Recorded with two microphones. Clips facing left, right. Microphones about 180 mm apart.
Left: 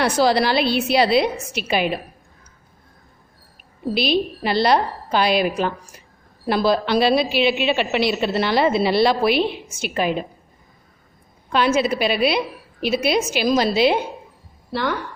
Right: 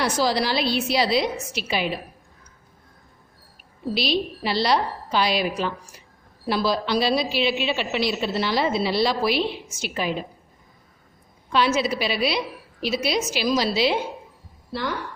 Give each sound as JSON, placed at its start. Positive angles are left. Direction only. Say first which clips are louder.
{"t": 0.0, "sound": "a woman's voice", "louder": "left 5 dB", "side_deg": 60}
{"t": 3.9, "sound": "a woman's voice", "louder": "left 4 dB", "side_deg": 55}
{"t": 11.4, "sound": "a woman's voice", "louder": "left 3 dB", "side_deg": 50}
{"t": 14.7, "sound": "a woman's voice", "louder": "left 5 dB", "side_deg": 70}